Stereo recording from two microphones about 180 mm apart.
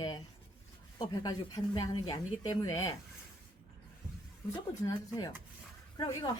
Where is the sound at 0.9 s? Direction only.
25° left (ahead or behind).